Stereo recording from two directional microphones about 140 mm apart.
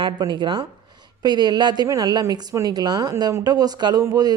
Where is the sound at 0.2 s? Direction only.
30° right (ahead or behind).